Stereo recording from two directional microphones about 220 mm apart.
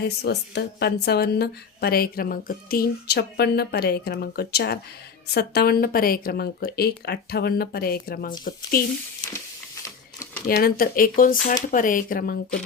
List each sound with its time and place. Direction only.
0.0 s a woman's voice: 50° left (ahead or behind)
10.5 s speech: 40° left (ahead or behind)